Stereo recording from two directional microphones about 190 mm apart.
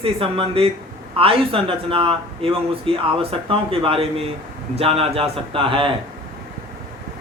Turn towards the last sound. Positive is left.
turn(degrees=-25)  # may be behind; listen again after turning